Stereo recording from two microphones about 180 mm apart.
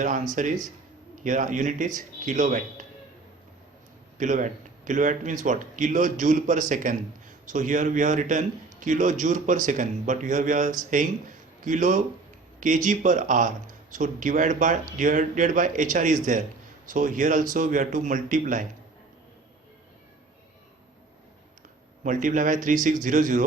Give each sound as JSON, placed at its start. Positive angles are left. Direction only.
{"t": 0.0, "sound": "a man's voice", "side_deg": -45}
{"t": 4.2, "sound": "a man's voice", "side_deg": -45}
{"t": 22.0, "sound": "a man's voice", "side_deg": -45}